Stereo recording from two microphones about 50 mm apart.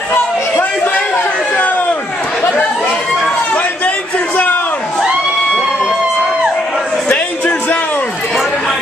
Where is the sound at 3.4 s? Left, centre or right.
Left.